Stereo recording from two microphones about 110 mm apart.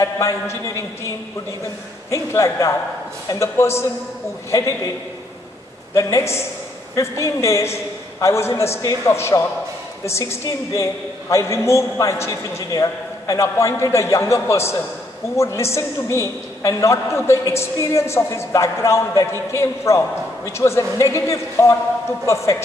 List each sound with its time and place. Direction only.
0.0 s a woman's voice: 25° left (ahead or behind)
2.0 s a woman's voice: 25° left (ahead or behind)
5.9 s a woman's voice: 25° left (ahead or behind)